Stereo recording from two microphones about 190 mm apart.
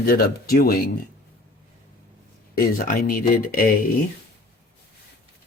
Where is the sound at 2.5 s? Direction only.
50° left (ahead or behind).